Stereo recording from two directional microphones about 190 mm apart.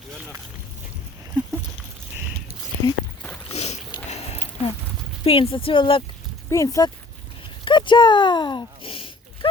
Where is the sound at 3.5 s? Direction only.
35° left (ahead or behind).